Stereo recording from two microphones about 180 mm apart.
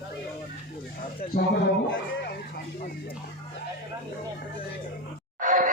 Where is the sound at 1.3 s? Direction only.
55° left (ahead or behind).